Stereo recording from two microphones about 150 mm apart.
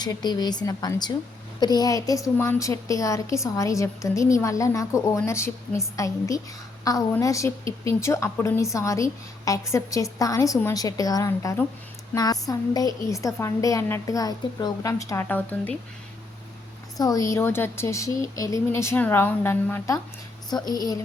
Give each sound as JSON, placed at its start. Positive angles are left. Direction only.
{"t": 0.0, "sound": "a woman's voice", "side_deg": 30}
{"t": 17.0, "sound": "speech", "side_deg": 25}
{"t": 20.5, "sound": "a woman's voice", "side_deg": 25}